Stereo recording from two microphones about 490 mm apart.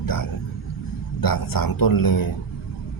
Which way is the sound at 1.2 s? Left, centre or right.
Left.